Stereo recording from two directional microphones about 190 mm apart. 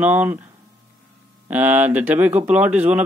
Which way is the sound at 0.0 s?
10° right (ahead or behind).